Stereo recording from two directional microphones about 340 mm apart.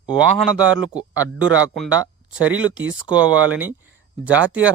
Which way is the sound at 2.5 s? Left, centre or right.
Right.